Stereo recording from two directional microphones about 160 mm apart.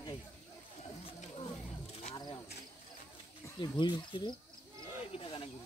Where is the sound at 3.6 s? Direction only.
30° left (ahead or behind).